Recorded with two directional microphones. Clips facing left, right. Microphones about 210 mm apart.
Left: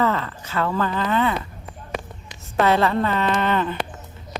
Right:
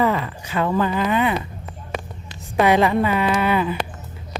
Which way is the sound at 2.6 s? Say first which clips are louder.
Right 2 dB; 15° right (ahead or behind).